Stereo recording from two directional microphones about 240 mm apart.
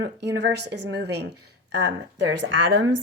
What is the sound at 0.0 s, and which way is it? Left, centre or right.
Speech, right.